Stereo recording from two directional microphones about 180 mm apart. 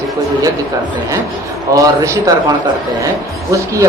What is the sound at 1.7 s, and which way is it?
Speech, 15° right (ahead or behind).